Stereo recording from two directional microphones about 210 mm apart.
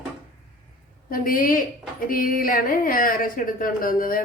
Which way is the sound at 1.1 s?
40° left (ahead or behind).